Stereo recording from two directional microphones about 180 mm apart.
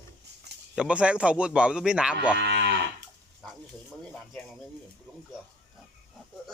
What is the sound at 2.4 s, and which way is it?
Moo, 75° right (ahead or behind).